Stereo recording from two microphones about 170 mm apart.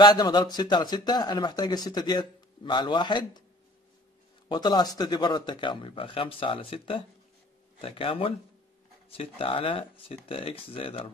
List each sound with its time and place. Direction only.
0.0 s speech: 25° left (ahead or behind)
4.5 s speech: 25° left (ahead or behind)